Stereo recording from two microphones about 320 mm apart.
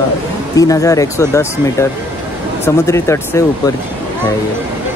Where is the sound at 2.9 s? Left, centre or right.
Centre.